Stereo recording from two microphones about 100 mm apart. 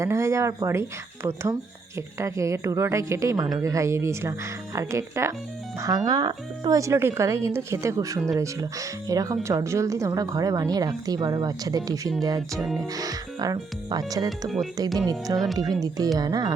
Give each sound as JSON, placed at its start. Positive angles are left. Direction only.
{"t": 0.0, "sound": "speech", "side_deg": -30}
{"t": 3.3, "sound": "speech", "side_deg": -40}
{"t": 14.3, "sound": "speech", "side_deg": 0}
{"t": 14.9, "sound": "speech", "side_deg": -40}